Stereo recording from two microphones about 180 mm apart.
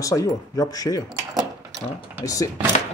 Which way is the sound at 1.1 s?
20° right (ahead or behind).